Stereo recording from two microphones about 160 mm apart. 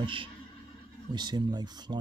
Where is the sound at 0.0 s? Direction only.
30° right (ahead or behind).